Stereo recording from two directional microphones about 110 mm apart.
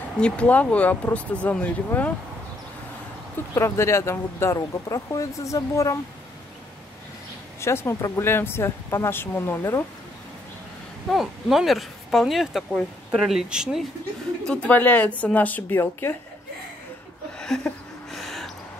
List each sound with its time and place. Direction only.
0.2 s speech: 10° left (ahead or behind)
3.5 s speech: 25° left (ahead or behind)
7.6 s speech: 25° left (ahead or behind)
11.1 s speech: centre (ahead or behind)
14.5 s speech: 15° left (ahead or behind)
17.4 s a sound: 5° left (ahead or behind)